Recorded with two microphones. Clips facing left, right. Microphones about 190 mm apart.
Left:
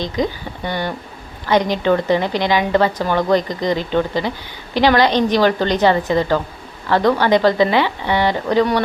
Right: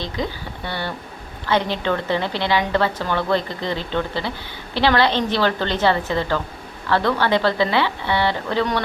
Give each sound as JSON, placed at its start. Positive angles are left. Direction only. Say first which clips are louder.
{"t": 0.0, "sound": "a woman's voice", "louder": "left 6 dB", "side_deg": 15}